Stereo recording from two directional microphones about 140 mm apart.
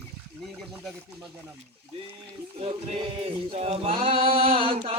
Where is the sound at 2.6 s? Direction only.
40° right (ahead or behind).